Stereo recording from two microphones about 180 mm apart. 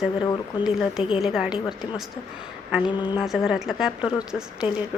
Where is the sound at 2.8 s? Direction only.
25° left (ahead or behind).